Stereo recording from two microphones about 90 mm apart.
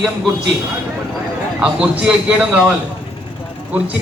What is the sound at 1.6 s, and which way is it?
A man's voice, 10° right (ahead or behind).